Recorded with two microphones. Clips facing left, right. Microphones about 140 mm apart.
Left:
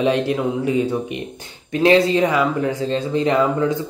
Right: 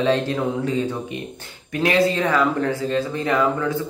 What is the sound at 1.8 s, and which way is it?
Speech, 25° left (ahead or behind).